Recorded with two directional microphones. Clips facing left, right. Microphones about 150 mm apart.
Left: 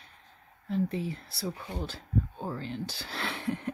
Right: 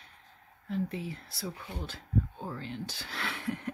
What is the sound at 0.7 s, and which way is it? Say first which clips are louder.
Speech: left 4 dB; 30° left (ahead or behind).